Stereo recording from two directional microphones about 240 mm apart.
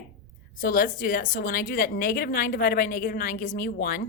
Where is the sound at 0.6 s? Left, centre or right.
Left.